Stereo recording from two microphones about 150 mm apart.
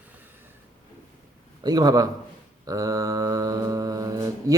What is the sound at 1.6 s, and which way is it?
Speech, 25° right (ahead or behind).